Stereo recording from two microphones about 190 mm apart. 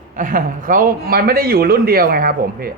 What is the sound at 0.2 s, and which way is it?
A man's voice, 45° right (ahead or behind).